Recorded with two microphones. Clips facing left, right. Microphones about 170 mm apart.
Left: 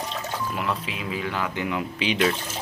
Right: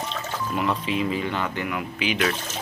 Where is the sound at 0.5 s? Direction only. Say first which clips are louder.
Right 5 dB; centre (ahead or behind).